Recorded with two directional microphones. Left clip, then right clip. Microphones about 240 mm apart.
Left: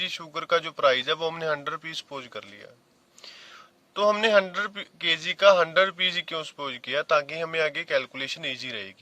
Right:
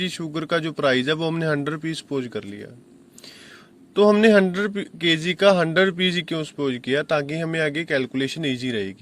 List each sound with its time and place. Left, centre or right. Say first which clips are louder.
0.0 s a man's voice: right 3 dB; centre
3.9 s a man's voice: right 5 dB; centre